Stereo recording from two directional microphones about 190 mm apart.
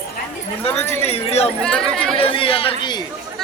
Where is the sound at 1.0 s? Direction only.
35° left (ahead or behind).